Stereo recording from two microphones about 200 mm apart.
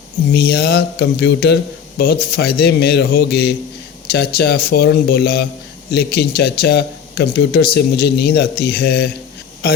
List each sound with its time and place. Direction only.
0.3 s speech: 50° left (ahead or behind)